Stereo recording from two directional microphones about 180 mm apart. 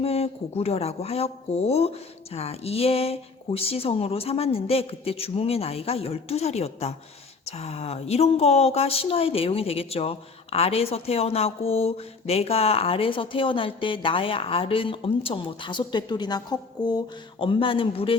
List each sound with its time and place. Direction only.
0.0 s a woman's voice: 35° left (ahead or behind)